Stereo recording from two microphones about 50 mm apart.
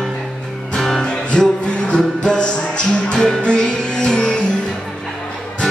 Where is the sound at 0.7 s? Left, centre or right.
Centre.